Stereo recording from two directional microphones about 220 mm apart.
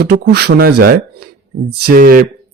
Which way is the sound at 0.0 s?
45° right (ahead or behind).